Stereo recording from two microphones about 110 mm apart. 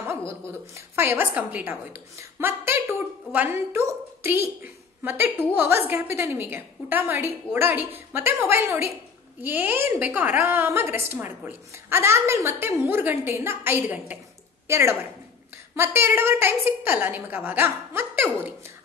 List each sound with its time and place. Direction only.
0.3 s a woman's voice: 20° right (ahead or behind)